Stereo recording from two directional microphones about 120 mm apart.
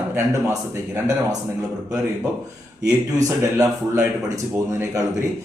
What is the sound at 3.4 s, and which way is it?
A man's voice, 25° right (ahead or behind).